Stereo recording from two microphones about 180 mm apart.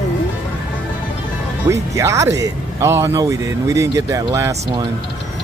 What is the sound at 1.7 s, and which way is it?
Speech, 15° right (ahead or behind).